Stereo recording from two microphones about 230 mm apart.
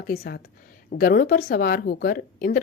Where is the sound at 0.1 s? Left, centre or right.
Left.